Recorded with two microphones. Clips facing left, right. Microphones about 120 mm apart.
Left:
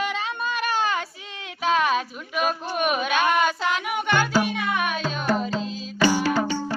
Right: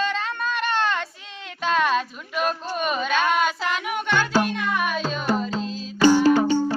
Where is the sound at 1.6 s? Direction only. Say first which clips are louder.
Even; 5° left (ahead or behind).